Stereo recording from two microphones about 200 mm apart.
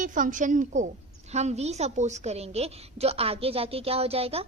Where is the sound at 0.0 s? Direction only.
40° right (ahead or behind).